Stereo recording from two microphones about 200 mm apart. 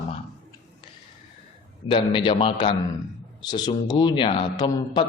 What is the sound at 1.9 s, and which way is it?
A man's voice, 25° left (ahead or behind).